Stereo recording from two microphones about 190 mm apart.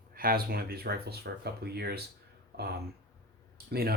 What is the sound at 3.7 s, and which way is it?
Speech, 55° right (ahead or behind).